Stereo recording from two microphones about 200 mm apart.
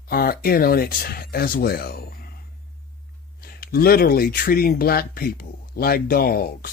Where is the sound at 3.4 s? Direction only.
50° left (ahead or behind).